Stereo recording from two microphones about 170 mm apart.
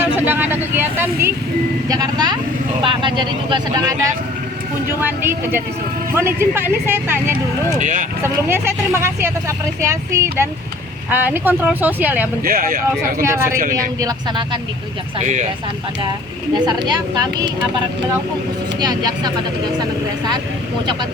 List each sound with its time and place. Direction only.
0.2 s speech: 10° right (ahead or behind)
1.9 s speech: 25° right (ahead or behind)
4.9 s speech: 10° right (ahead or behind)
7.8 s speech: 50° right (ahead or behind)
8.2 s speech: 15° right (ahead or behind)
12.4 s speech: 60° right (ahead or behind)
13.2 s speech: 15° right (ahead or behind)
13.6 s speech: 55° right (ahead or behind)
14.0 s speech: 25° right (ahead or behind)
15.2 s speech: 45° right (ahead or behind)
16.6 s speech: 25° right (ahead or behind)
18.8 s speech: 25° right (ahead or behind)